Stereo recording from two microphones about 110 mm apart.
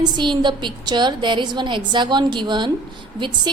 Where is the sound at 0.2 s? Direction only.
45° right (ahead or behind).